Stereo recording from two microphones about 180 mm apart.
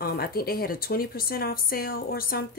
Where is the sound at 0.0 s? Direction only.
55° left (ahead or behind).